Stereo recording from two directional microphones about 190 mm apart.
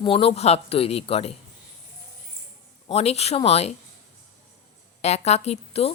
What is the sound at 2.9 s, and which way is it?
Speech, 35° left (ahead or behind).